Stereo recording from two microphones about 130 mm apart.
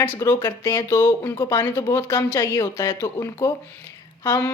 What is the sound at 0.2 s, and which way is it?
Speech, 25° left (ahead or behind).